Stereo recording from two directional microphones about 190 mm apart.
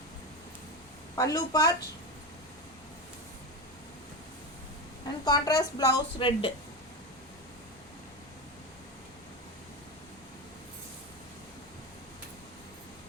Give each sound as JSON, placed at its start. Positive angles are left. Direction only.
{"t": 1.1, "sound": "speech", "side_deg": 20}
{"t": 5.2, "sound": "speech", "side_deg": 20}